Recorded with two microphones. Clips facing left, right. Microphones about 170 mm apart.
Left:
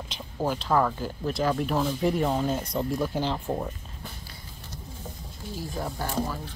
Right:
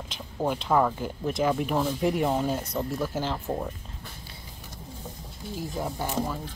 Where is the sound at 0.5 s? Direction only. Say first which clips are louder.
Right 1 dB; 10° right (ahead or behind).